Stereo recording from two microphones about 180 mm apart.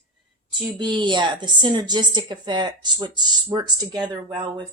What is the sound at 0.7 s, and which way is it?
Speech, 25° right (ahead or behind).